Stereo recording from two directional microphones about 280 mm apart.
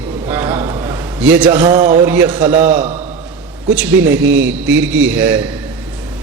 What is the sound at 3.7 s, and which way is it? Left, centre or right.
Speech, centre.